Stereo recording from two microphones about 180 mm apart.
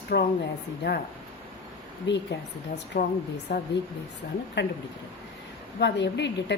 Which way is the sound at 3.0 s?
60° left (ahead or behind).